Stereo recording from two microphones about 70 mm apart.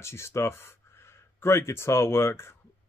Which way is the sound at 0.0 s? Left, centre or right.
Left.